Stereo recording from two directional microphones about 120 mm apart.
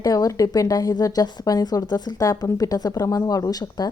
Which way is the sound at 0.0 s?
30° left (ahead or behind).